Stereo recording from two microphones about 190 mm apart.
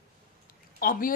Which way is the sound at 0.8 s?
50° left (ahead or behind).